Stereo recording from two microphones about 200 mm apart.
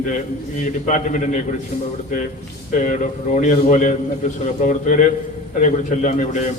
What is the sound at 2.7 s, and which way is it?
Speech, 40° left (ahead or behind).